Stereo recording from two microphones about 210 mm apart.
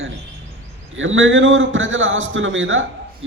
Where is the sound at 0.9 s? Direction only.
65° right (ahead or behind).